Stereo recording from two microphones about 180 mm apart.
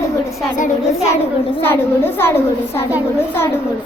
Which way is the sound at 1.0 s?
35° left (ahead or behind).